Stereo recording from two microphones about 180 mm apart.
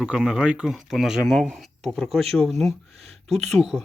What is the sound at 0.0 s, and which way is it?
Speech, 5° right (ahead or behind).